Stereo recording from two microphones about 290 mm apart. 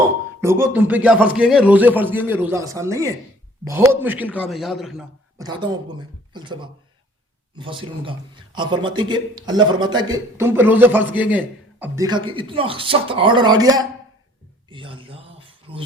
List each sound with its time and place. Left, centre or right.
0.4 s a man's voice: centre
5.4 s a man's voice: centre
14.7 s a sound: centre